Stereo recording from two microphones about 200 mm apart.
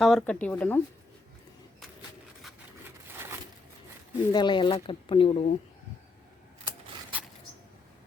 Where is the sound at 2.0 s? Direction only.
10° right (ahead or behind).